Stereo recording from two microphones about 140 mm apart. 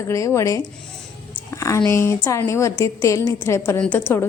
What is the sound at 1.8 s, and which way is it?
A woman's voice, 20° left (ahead or behind).